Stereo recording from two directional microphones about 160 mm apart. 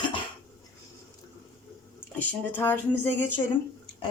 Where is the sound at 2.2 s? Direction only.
10° left (ahead or behind).